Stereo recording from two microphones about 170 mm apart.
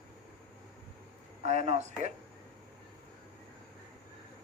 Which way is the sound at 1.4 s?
40° right (ahead or behind).